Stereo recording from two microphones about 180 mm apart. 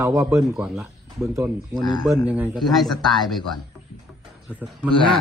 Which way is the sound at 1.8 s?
25° left (ahead or behind).